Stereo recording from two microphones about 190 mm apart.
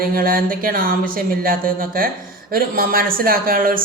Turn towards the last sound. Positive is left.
turn(degrees=-50)  # may be behind; listen again after turning